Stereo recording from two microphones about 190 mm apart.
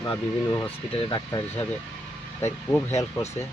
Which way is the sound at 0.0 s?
15° left (ahead or behind).